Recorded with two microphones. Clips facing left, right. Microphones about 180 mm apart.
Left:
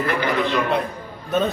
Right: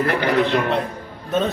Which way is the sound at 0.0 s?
55° right (ahead or behind).